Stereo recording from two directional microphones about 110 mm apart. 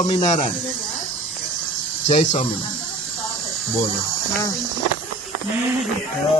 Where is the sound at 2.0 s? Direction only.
90° left.